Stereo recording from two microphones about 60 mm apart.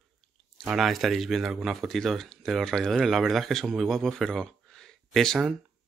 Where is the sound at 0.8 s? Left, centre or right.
Centre.